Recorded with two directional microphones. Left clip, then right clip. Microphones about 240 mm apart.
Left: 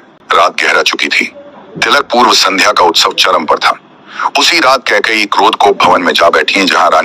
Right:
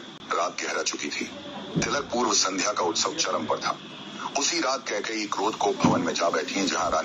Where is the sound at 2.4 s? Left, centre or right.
Left.